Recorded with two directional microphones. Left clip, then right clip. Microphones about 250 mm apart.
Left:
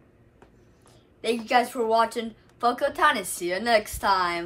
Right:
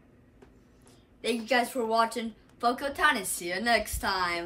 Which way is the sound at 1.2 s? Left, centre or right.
Centre.